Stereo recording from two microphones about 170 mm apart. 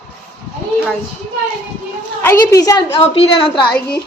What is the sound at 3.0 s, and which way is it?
Speech, 35° left (ahead or behind).